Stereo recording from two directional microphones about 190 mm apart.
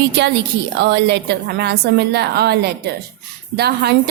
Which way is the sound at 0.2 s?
65° right (ahead or behind).